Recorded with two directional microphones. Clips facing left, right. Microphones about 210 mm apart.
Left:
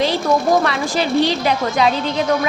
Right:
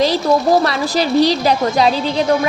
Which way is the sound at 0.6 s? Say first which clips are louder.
Right 2 dB; 35° right (ahead or behind).